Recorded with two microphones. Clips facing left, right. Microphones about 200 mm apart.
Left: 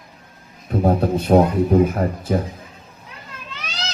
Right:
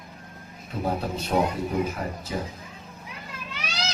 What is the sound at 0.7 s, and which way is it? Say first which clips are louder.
A man's voice: left 10 dB; 50° left (ahead or behind).